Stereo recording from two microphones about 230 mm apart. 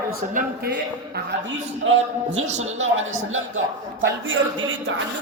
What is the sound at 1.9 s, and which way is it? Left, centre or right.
Speech, right.